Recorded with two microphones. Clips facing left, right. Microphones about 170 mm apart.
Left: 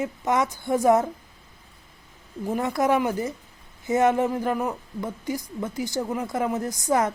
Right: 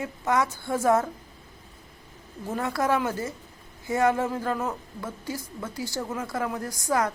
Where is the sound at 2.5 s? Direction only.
20° left (ahead or behind).